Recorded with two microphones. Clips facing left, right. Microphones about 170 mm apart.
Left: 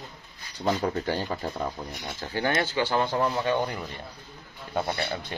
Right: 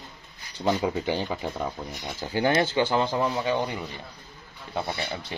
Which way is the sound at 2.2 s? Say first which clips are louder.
Right 4 dB; 15° right (ahead or behind).